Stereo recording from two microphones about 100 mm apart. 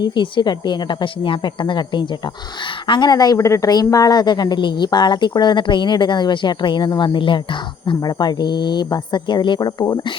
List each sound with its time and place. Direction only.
0.0 s a woman's voice: 50° left (ahead or behind)
8.0 s a woman's voice: 45° left (ahead or behind)